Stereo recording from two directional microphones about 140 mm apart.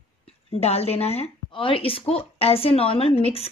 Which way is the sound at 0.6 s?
50° left (ahead or behind).